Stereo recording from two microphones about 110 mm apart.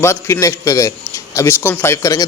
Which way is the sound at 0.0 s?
25° left (ahead or behind).